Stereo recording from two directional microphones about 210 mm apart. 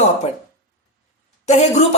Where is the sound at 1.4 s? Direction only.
30° left (ahead or behind).